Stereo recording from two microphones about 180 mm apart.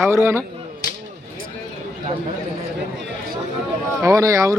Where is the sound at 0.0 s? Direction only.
15° right (ahead or behind).